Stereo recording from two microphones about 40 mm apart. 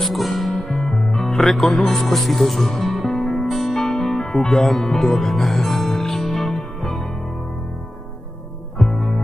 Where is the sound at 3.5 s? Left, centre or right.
Centre.